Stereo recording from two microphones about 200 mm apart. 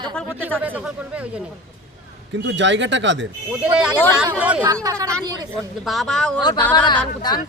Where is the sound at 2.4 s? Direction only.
65° right (ahead or behind).